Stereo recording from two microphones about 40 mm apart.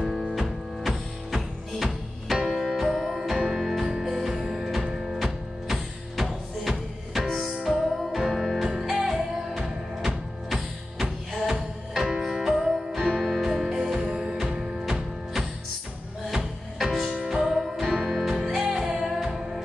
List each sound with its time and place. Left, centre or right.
0.0 s music: centre
0.4 s music: centre
12.9 s music: centre
13.2 s music: centre
17.3 s music: centre
17.8 s music: centre
18.6 s music: centre